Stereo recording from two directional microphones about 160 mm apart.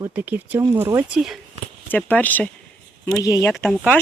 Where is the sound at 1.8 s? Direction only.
10° left (ahead or behind).